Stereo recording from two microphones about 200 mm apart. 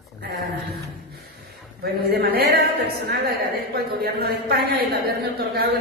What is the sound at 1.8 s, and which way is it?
A woman's voice, 50° right (ahead or behind).